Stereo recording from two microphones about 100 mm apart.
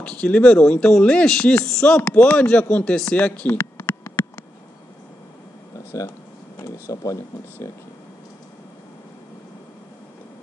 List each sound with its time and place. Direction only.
0.0 s speech: 10° left (ahead or behind)
2.0 s speech: 20° left (ahead or behind)
3.2 s a sound: 20° left (ahead or behind)
5.9 s speech: 30° left (ahead or behind)